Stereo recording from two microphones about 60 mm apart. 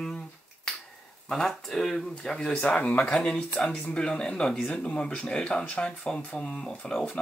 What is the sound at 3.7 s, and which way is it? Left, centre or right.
Speech, left.